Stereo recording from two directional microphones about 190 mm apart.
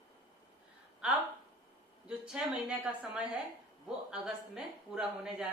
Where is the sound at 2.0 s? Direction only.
5° right (ahead or behind).